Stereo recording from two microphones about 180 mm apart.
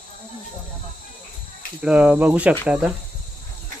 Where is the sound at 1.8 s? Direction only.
5° right (ahead or behind).